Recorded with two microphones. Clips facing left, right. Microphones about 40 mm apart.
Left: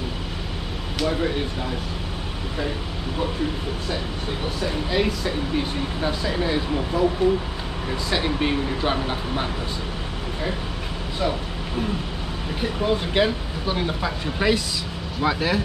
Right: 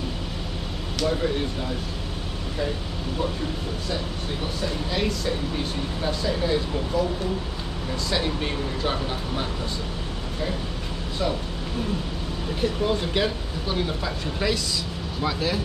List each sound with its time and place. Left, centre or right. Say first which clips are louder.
0.9 s speech: left 1 dB; centre
4.6 s speech: left 4 dB; centre
8.1 s speech: left 4 dB; centre
12.5 s speech: left 1 dB; centre